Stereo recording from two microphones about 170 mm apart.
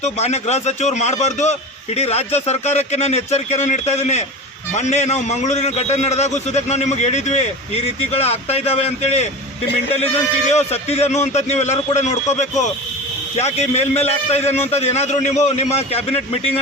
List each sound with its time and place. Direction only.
0.0 s a man's voice: 40° left (ahead or behind)
10.5 s a man's voice: 40° left (ahead or behind)